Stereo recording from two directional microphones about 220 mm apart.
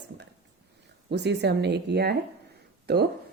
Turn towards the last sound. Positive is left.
turn(degrees=-45)  # may be behind; listen again after turning